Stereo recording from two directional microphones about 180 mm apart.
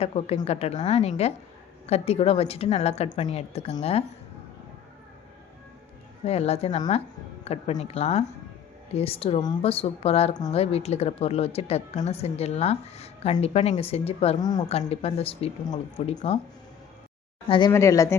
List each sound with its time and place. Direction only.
0.0 s speech: 35° left (ahead or behind)
6.2 s speech: 35° left (ahead or behind)
14.7 s speech: 35° left (ahead or behind)
17.7 s speech: 15° left (ahead or behind)